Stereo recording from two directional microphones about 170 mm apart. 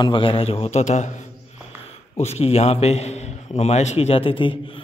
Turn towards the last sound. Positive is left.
turn(degrees=30)  # may be behind; listen again after turning